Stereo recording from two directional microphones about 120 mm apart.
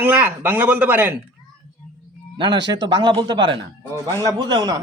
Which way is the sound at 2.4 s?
40° right (ahead or behind).